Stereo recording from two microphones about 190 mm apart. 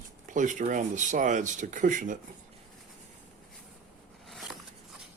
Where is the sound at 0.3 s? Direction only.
40° right (ahead or behind).